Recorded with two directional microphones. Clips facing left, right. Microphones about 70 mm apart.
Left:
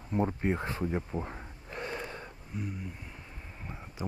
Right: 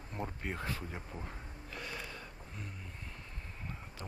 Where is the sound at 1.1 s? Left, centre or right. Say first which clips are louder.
Left 9 dB; left.